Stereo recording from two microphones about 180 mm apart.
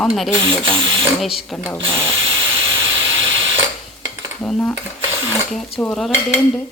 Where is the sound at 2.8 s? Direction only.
90° right.